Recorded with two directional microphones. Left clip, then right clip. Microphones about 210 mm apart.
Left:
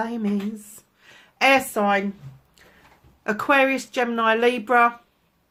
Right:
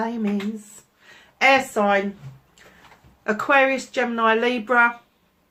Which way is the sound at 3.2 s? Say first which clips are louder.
Right 1 dB; 45° left (ahead or behind).